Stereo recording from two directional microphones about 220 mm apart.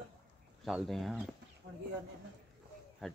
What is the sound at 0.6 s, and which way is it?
Speech, centre (ahead or behind).